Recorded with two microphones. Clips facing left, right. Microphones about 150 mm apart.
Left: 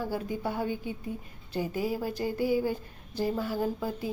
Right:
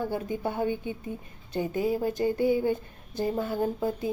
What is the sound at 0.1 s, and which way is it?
Speech, 20° right (ahead or behind).